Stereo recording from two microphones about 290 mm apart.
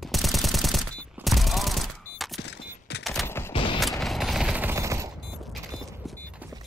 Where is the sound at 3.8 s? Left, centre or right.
Centre.